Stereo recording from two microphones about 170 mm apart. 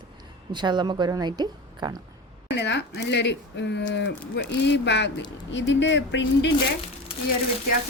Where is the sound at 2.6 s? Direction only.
85° left.